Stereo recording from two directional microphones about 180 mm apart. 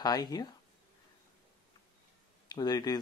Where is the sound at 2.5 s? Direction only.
20° left (ahead or behind).